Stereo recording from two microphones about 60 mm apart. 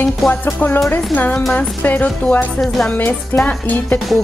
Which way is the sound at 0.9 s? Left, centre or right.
Left.